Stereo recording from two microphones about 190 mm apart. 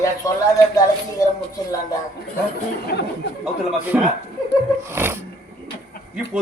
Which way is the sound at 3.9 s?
10° right (ahead or behind).